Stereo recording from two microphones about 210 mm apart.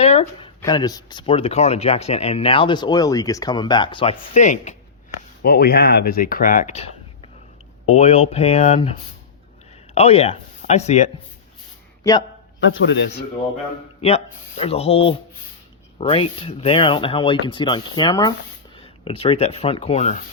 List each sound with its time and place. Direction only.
0.0 s a sound: 30° left (ahead or behind)
0.6 s speech: 20° left (ahead or behind); by 4.8 s 35° left (ahead or behind)
5.4 s speech: 45° left (ahead or behind)
12.5 s a man's voice: 65° left (ahead or behind)
14.0 s speech: 30° left (ahead or behind)